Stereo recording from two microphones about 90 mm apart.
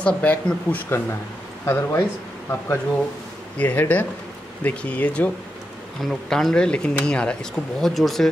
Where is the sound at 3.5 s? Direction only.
20° left (ahead or behind).